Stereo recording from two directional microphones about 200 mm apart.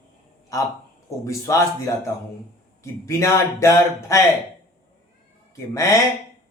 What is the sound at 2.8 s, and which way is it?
A man's voice, 15° left (ahead or behind).